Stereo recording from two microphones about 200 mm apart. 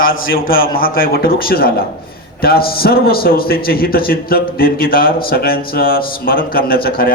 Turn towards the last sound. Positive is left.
turn(degrees=50)  # may be behind; listen again after turning